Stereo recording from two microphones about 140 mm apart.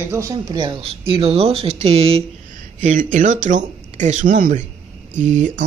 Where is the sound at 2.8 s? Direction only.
65° right (ahead or behind).